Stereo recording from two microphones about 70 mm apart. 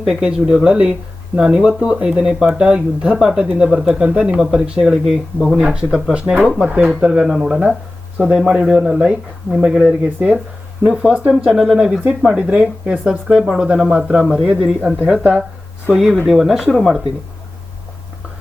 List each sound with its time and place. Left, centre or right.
0.0 s speech: centre
5.6 s speech: centre
10.8 s a man's voice: centre
14.3 s a man's voice: centre